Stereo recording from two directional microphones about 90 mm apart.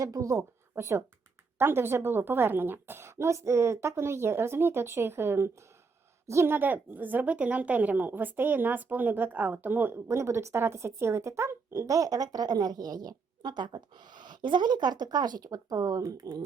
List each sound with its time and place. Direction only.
0.0 s a woman's voice: 35° right (ahead or behind)